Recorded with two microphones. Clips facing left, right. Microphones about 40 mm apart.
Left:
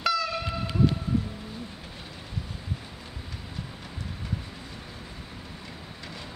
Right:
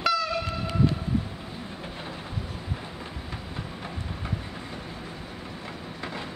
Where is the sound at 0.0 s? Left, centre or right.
Centre.